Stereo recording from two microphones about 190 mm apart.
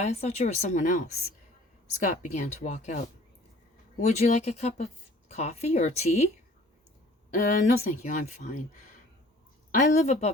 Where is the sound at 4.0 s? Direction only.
35° left (ahead or behind).